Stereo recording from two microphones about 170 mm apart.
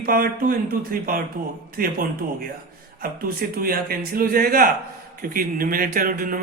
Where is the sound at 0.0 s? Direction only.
60° right (ahead or behind).